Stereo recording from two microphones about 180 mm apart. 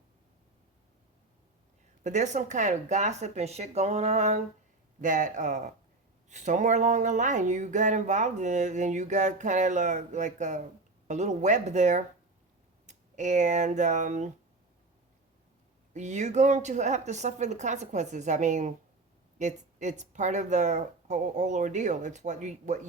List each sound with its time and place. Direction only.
2.0 s speech: 40° right (ahead or behind)
15.9 s speech: 40° right (ahead or behind)